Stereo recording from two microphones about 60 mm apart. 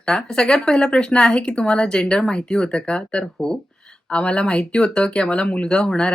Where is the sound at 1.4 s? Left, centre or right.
Centre.